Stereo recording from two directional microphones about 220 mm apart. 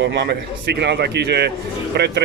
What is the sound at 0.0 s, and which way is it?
Speech, 50° right (ahead or behind).